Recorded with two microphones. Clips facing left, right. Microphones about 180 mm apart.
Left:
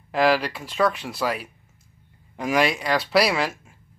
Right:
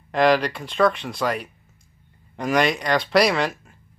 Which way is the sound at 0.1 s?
5° left (ahead or behind).